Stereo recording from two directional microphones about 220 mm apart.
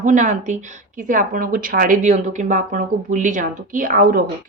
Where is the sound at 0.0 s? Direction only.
35° right (ahead or behind).